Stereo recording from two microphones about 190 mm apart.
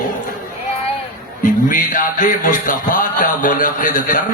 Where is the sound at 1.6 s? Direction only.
45° left (ahead or behind).